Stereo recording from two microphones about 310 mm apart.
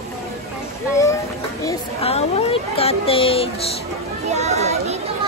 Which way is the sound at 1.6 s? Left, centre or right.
Centre.